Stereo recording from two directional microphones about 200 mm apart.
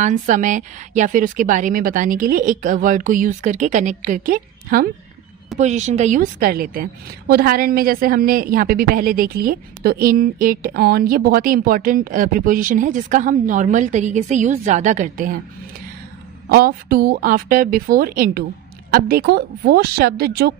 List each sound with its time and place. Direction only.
0.0 s a woman's voice: 40° right (ahead or behind)
5.6 s a woman's voice: 35° right (ahead or behind)
16.4 s a woman's voice: 50° right (ahead or behind)